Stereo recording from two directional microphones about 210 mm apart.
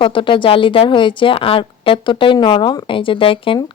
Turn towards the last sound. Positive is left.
turn(degrees=25)  # may be behind; listen again after turning